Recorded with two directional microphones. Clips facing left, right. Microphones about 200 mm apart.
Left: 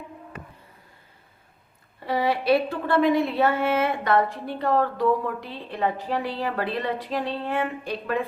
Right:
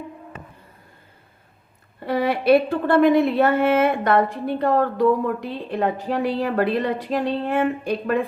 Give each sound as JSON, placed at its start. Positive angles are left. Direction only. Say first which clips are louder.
{"t": 2.0, "sound": "a woman's voice", "louder": "right 4 dB", "side_deg": -55}